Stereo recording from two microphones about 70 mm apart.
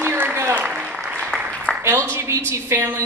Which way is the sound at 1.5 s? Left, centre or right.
Centre.